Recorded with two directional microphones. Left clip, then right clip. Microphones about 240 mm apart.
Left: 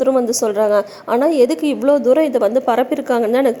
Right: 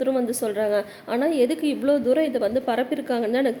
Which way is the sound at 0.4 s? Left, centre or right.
Centre.